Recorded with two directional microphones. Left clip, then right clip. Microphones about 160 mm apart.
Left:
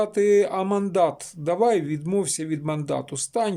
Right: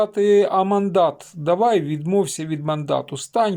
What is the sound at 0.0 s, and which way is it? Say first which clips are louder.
Speech: right 3 dB; 5° left (ahead or behind).